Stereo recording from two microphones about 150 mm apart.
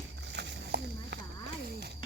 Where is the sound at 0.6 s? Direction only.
90° right.